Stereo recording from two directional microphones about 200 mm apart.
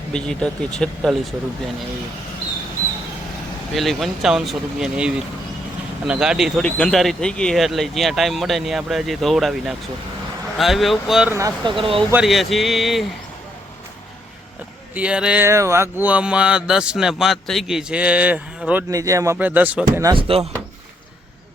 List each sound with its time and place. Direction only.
0.1 s speech: 5° left (ahead or behind)
3.8 s speech: centre (ahead or behind)
11.3 s speech: 20° right (ahead or behind)
12.1 s speech: centre (ahead or behind)
14.9 s a sound: 5° right (ahead or behind)
20.1 s speech: 25° right (ahead or behind)